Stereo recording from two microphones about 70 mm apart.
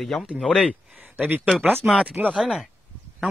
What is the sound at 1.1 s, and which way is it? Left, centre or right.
Speech, right.